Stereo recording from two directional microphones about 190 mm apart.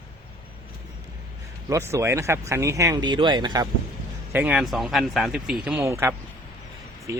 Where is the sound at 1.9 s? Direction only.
15° right (ahead or behind).